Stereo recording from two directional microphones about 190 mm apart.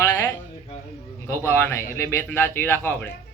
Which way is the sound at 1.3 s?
10° left (ahead or behind).